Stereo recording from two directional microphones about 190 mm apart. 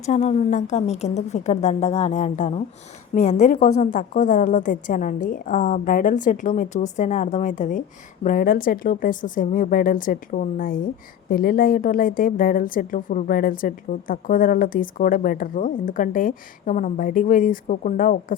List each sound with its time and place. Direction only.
0.0 s a woman's voice: 35° left (ahead or behind)